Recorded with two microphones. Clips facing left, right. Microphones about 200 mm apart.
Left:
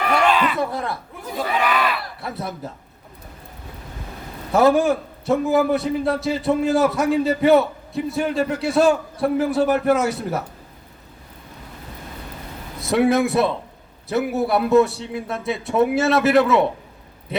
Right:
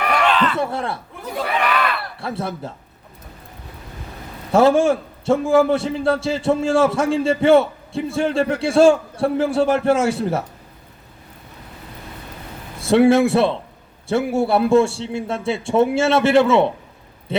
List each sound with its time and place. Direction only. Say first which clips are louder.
0.3 s a sound: right 1 dB; 10° left (ahead or behind)
0.6 s a man's voice: right 1 dB; 25° right (ahead or behind)
2.2 s a man's voice: right 5 dB; 30° right (ahead or behind)
4.5 s a man's voice: right 2 dB; 25° right (ahead or behind)
12.8 s a man's voice: right 4 dB; 30° right (ahead or behind)